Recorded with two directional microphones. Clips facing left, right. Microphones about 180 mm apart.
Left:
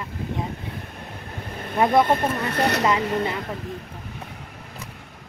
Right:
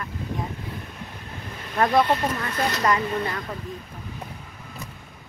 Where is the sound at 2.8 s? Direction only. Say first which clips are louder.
Left 2 dB; 20° left (ahead or behind).